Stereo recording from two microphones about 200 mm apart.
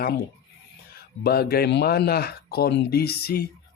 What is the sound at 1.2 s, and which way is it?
Speech, 50° left (ahead or behind).